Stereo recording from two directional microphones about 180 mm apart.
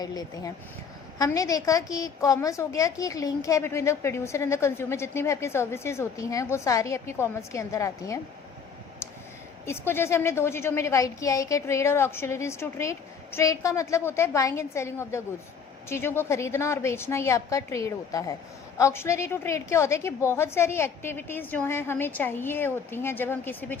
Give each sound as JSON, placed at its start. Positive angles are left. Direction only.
{"t": 0.0, "sound": "a woman's voice", "side_deg": 20}
{"t": 9.6, "sound": "a woman's voice", "side_deg": 15}